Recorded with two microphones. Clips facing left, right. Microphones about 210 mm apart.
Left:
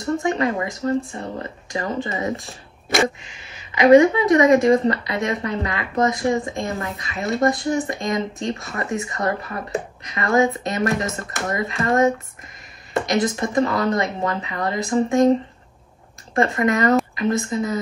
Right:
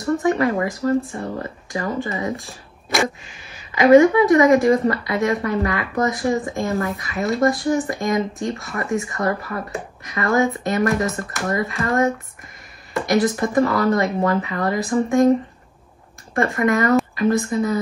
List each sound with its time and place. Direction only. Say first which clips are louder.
0.0 s speech: right 2 dB; 20° left (ahead or behind)
2.3 s speech: left 1 dB; centre (ahead or behind)
3.7 s speech: right 1 dB; 20° left (ahead or behind)
16.3 s speech: even; 20° left (ahead or behind)